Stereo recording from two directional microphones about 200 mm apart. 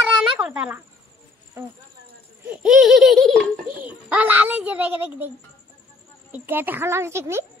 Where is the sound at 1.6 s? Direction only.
15° right (ahead or behind).